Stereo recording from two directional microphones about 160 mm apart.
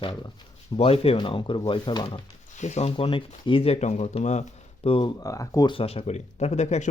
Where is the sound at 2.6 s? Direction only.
45° left (ahead or behind).